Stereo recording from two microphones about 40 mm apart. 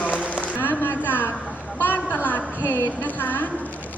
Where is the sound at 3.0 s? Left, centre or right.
Left.